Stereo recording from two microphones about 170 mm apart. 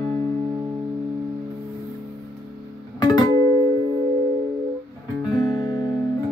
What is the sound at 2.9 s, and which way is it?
Music, 25° left (ahead or behind).